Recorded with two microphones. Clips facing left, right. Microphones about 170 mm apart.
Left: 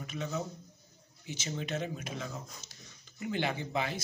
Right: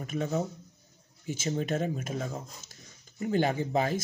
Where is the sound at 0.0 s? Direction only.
50° right (ahead or behind).